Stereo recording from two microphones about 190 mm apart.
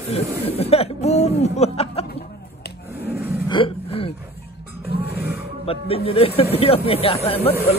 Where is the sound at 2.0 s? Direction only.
60° left (ahead or behind).